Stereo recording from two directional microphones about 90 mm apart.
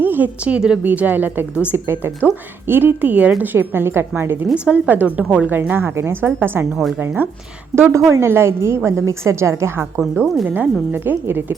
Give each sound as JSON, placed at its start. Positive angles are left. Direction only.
{"t": 0.0, "sound": "a woman's voice", "side_deg": -20}
{"t": 4.5, "sound": "a woman's voice", "side_deg": -10}
{"t": 7.8, "sound": "a woman's voice", "side_deg": -25}
{"t": 10.4, "sound": "a woman's voice", "side_deg": -20}